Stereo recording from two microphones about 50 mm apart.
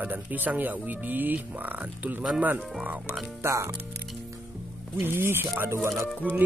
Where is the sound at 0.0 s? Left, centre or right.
Right.